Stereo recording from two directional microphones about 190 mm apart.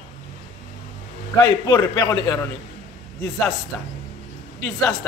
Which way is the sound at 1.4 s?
20° left (ahead or behind).